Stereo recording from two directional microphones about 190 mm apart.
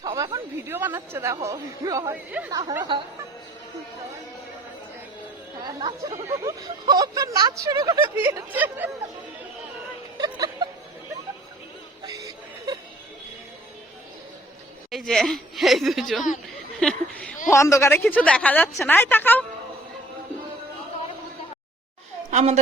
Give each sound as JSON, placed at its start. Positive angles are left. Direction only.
{"t": 0.0, "sound": "speech", "side_deg": -15}
{"t": 5.6, "sound": "speech", "side_deg": -25}
{"t": 10.2, "sound": "music", "side_deg": -20}
{"t": 12.0, "sound": "a sound", "side_deg": -20}
{"t": 14.8, "sound": "a woman's voice", "side_deg": 0}
{"t": 22.3, "sound": "a woman's voice", "side_deg": -40}